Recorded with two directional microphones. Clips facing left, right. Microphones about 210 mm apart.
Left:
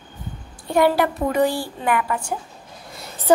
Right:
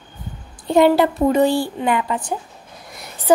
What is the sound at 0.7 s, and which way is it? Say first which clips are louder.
A woman's voice: right 4 dB; 25° right (ahead or behind).